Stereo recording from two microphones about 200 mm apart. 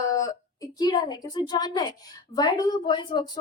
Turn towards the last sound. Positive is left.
turn(degrees=25)  # may be behind; listen again after turning